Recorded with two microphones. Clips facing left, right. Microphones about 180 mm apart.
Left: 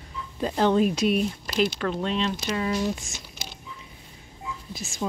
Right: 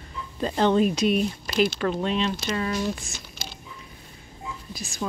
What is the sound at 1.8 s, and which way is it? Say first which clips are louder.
Speech: right 2 dB; 5° right (ahead or behind).